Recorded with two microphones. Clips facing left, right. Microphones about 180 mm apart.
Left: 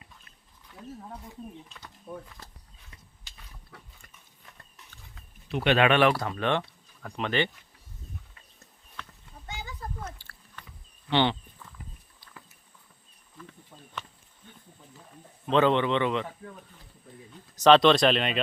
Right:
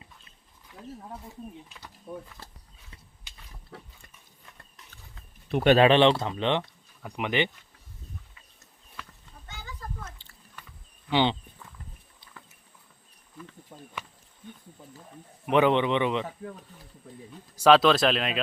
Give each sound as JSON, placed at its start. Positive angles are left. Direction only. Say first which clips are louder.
{"t": 5.5, "sound": "speech", "louder": "right 5 dB", "side_deg": -50}
{"t": 5.7, "sound": "speech", "louder": "right 3 dB", "side_deg": -30}
{"t": 10.2, "sound": "a sound", "louder": "even", "side_deg": -15}
{"t": 13.7, "sound": "a sound", "louder": "right 5 dB", "side_deg": -40}
{"t": 15.4, "sound": "speech", "louder": "right 1 dB", "side_deg": -15}
{"t": 17.6, "sound": "speech", "louder": "left 1 dB", "side_deg": -5}